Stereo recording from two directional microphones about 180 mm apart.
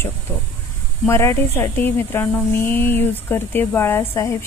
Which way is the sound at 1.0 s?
15° left (ahead or behind).